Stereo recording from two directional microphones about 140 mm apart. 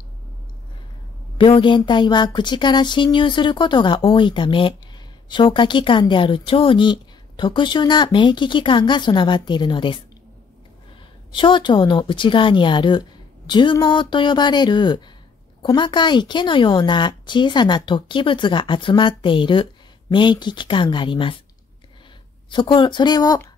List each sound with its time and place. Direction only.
1.4 s a woman's voice: 35° left (ahead or behind)
11.3 s a woman's voice: 35° left (ahead or behind)
22.5 s a woman's voice: 35° left (ahead or behind)